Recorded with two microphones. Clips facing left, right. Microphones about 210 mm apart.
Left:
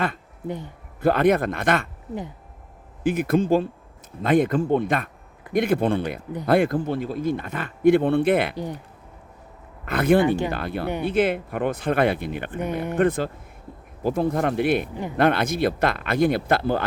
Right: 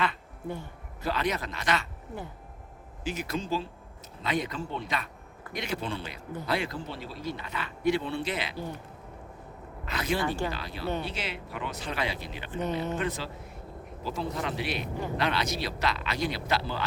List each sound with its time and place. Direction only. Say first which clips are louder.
0.4 s speech: left 5 dB; 20° left (ahead or behind)
1.0 s speech: left 12 dB; 55° left (ahead or behind)
3.0 s speech: left 12 dB; 55° left (ahead or behind)
9.8 s speech: left 12 dB; 55° left (ahead or behind)
10.2 s speech: left 8 dB; 20° left (ahead or behind)
10.5 s speech: left 6 dB; 55° left (ahead or behind)